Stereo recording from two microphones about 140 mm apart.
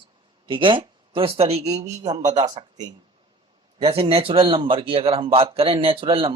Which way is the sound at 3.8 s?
45° right (ahead or behind).